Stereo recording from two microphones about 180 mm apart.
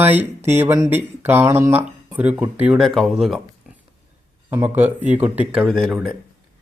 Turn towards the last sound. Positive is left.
turn(degrees=0)  # may be behind; listen again after turning